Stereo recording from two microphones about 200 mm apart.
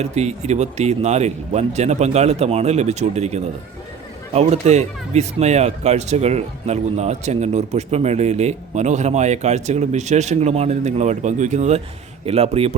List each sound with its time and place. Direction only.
0.0 s speech: 35° right (ahead or behind)